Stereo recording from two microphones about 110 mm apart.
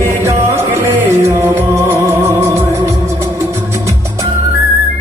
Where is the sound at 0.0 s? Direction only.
25° right (ahead or behind).